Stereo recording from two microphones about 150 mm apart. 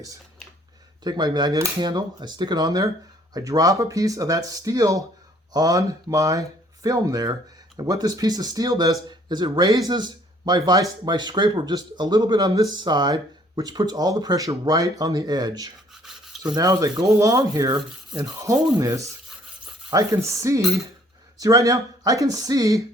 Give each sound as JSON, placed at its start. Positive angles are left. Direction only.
{"t": 1.0, "sound": "speech", "side_deg": -30}
{"t": 15.9, "sound": "rub", "side_deg": 0}
{"t": 16.6, "sound": "speech", "side_deg": -25}